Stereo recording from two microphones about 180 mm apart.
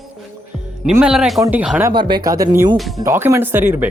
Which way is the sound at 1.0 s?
5° right (ahead or behind).